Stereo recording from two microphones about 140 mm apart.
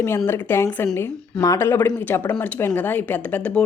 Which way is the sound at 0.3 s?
15° left (ahead or behind).